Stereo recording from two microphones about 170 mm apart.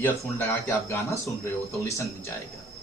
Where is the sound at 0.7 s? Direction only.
15° left (ahead or behind).